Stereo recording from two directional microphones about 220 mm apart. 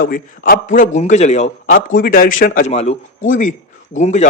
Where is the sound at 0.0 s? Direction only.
40° left (ahead or behind).